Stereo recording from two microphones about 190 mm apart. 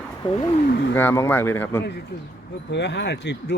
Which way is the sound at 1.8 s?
65° left (ahead or behind).